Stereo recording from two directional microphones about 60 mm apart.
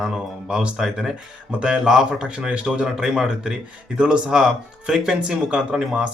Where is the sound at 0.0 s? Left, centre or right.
Centre.